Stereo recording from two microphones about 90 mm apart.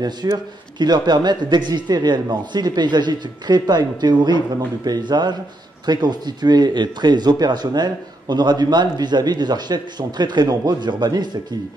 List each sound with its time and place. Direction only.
0.2 s speech: 45° right (ahead or behind)